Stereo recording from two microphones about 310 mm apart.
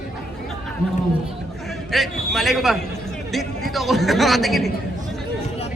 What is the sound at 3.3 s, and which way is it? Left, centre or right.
A man's voice, centre.